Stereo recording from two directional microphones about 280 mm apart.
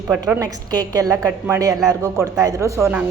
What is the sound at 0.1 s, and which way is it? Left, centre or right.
A woman's voice, centre.